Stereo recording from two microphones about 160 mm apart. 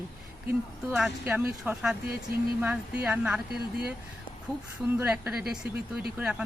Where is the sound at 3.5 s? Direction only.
80° right.